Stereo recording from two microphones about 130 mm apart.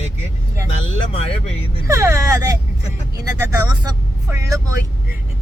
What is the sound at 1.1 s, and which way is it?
Speech, 45° left (ahead or behind).